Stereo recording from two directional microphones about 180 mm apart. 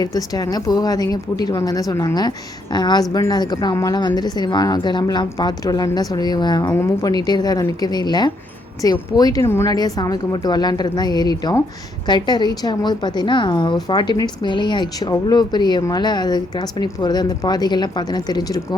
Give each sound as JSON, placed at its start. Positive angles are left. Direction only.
{"t": 0.0, "sound": "a woman's voice", "side_deg": 20}